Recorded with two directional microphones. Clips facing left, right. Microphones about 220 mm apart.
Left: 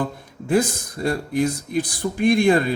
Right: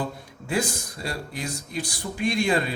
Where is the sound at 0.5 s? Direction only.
50° left (ahead or behind).